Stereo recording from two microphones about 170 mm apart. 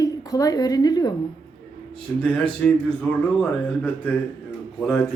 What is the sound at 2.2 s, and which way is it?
Speech, 5° left (ahead or behind).